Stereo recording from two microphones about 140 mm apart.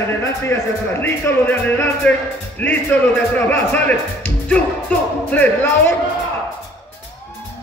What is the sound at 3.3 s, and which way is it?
Speech, 10° left (ahead or behind).